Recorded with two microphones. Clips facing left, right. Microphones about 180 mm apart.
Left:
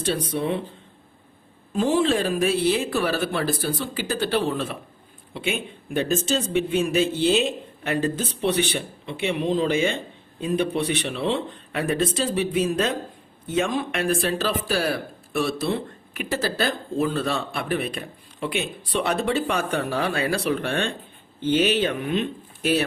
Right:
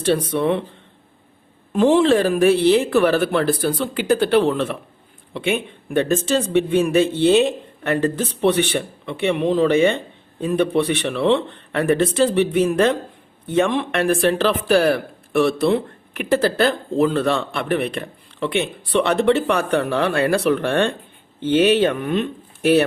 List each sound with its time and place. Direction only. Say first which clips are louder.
0.0 s speech: right 6 dB; 65° right (ahead or behind)
1.7 s speech: right 6 dB; 65° right (ahead or behind)